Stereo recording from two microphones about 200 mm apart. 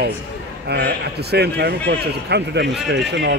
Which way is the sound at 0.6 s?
55° right (ahead or behind).